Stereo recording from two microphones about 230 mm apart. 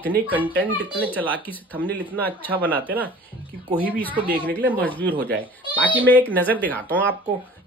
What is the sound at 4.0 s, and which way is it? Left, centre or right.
Speech, centre.